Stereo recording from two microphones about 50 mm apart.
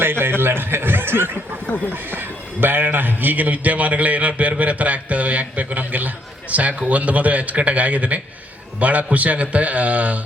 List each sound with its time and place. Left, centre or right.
0.0 s a man's voice: right